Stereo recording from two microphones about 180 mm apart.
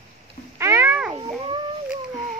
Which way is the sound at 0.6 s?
15° right (ahead or behind).